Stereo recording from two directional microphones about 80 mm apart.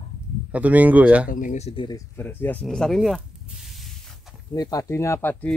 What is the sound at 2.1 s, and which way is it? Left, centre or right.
Speech, left.